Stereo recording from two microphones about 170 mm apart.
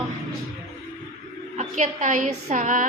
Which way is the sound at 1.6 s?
45° right (ahead or behind).